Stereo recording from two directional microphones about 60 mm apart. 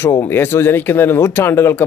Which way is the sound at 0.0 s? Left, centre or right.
Left.